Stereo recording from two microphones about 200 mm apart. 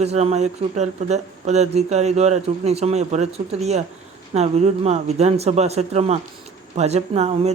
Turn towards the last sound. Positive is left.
turn(degrees=-30)  # may be behind; listen again after turning